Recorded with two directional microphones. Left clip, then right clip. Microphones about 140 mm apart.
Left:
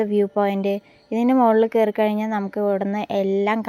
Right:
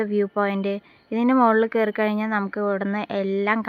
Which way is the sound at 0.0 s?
30° left (ahead or behind).